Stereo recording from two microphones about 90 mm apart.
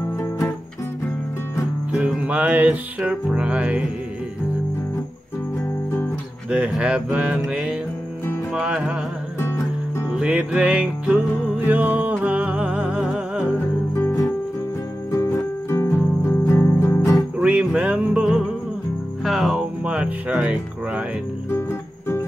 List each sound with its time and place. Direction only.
1.9 s music: 10° right (ahead or behind)
5.9 s music: 25° left (ahead or behind)
6.5 s music: 10° right (ahead or behind)
9.4 s music: 30° left (ahead or behind)
10.0 s music: 10° right (ahead or behind)
15.0 s music: 35° left (ahead or behind)
17.4 s music: 10° right (ahead or behind)
19.8 s music: 15° right (ahead or behind)
21.5 s music: 30° left (ahead or behind)